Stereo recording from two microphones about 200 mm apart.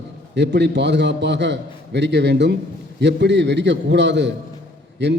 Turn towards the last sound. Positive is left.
turn(degrees=-60)  # may be behind; listen again after turning